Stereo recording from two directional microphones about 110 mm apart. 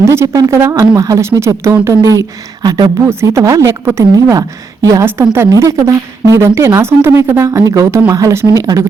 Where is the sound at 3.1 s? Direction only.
25° right (ahead or behind).